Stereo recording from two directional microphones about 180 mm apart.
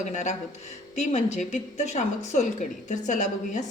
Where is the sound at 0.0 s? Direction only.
40° left (ahead or behind).